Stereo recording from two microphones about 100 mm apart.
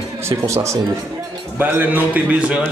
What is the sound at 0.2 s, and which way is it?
Speech, 30° right (ahead or behind).